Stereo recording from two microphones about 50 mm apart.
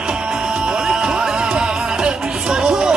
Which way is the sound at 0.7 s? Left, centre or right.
Centre.